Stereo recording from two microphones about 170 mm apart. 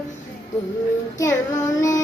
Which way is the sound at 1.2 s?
15° left (ahead or behind).